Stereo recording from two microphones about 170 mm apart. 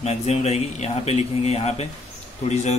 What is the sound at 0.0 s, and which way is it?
A man's voice, 40° left (ahead or behind).